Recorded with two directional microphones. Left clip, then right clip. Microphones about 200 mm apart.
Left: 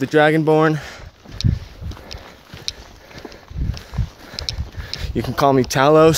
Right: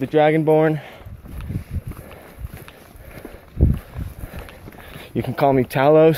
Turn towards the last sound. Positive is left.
turn(degrees=25)  # may be behind; listen again after turning